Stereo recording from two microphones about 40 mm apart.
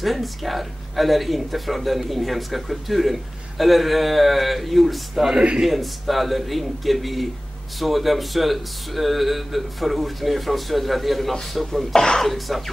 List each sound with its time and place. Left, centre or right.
0.0 s speech: centre
11.9 s speech: centre
12.2 s speech: centre